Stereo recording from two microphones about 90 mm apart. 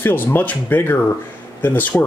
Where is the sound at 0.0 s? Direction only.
25° left (ahead or behind).